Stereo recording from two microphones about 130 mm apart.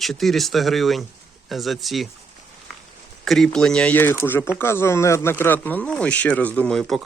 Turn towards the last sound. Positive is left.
turn(degrees=5)  # may be behind; listen again after turning